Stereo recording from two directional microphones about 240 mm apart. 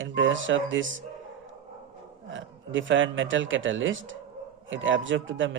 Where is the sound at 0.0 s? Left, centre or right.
Right.